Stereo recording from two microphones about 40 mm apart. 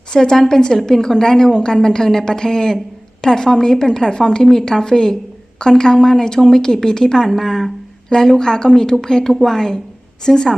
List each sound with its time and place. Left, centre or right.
0.1 s a woman's voice: centre